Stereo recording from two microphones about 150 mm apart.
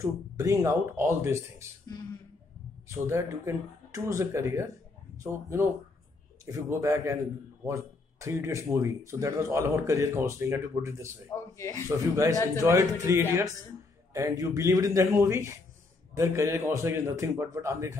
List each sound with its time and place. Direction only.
0.0 s speech: 25° right (ahead or behind)
2.9 s speech: 20° right (ahead or behind)
11.2 s speech: 20° left (ahead or behind)
12.5 s a man's voice: 20° right (ahead or behind)